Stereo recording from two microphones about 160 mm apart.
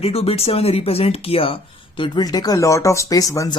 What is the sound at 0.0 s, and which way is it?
Speech, 40° left (ahead or behind).